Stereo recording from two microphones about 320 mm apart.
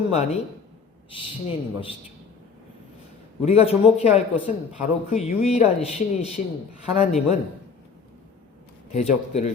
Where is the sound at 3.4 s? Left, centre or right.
Centre.